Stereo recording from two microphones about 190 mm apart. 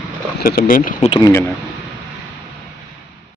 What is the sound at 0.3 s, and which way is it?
Speech, 50° left (ahead or behind).